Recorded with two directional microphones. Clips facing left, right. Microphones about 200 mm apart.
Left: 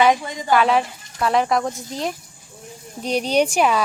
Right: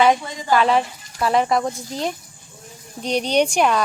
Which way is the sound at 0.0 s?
Centre (ahead or behind).